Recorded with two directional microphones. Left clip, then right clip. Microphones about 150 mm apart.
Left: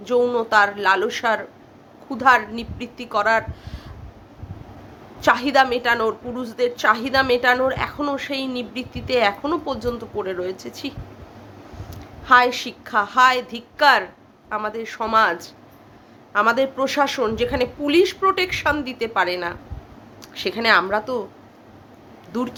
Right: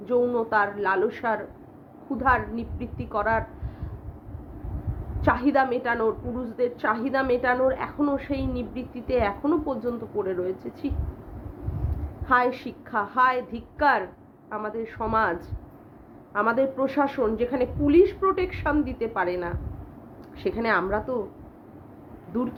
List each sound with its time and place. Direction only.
0.0 s a woman's voice: 15° left (ahead or behind)
5.2 s a woman's voice: 15° left (ahead or behind)
12.2 s a woman's voice: 15° left (ahead or behind)